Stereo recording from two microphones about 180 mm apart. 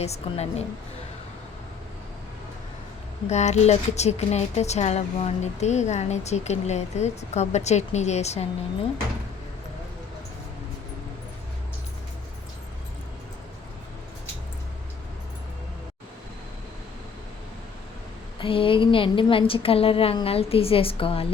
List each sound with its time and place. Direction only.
0.0 s speech: 35° left (ahead or behind)
3.2 s speech: 40° left (ahead or behind)
18.3 s speech: 30° left (ahead or behind)